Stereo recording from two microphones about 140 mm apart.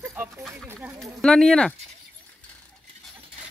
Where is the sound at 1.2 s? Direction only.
5° left (ahead or behind).